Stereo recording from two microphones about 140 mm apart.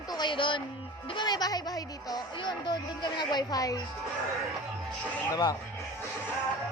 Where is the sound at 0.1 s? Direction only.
35° left (ahead or behind).